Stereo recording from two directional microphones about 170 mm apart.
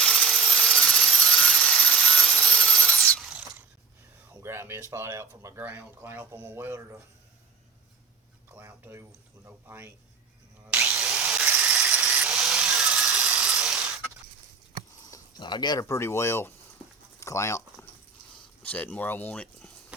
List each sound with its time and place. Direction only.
0.0 s sawing: centre (ahead or behind)
4.4 s speech: 15° right (ahead or behind)
8.4 s speech: 15° right (ahead or behind)
10.7 s drill: 15° right (ahead or behind)
11.0 s drill: centre (ahead or behind)
11.7 s tools: 5° right (ahead or behind)
15.1 s speech: 25° left (ahead or behind)
17.2 s a sound: 15° left (ahead or behind)
18.6 s speech: 10° left (ahead or behind)